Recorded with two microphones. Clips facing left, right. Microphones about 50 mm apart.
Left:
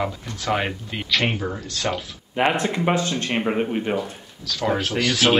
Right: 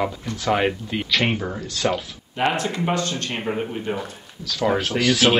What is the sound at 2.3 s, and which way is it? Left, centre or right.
A man's voice, centre.